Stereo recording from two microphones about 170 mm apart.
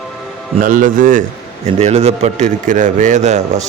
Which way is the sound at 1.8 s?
40° right (ahead or behind).